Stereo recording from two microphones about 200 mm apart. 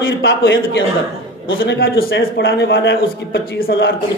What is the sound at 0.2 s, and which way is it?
A man's voice, 65° left (ahead or behind).